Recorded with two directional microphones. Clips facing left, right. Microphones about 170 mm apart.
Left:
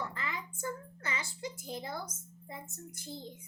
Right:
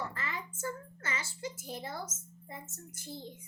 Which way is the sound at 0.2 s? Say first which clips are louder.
Even; 15° left (ahead or behind).